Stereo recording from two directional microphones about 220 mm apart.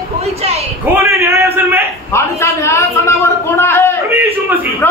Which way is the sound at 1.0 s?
15° right (ahead or behind).